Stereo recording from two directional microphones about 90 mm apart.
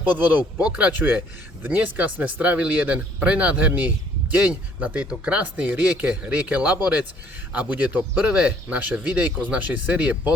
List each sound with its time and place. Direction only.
0.0 s speech: 20° right (ahead or behind)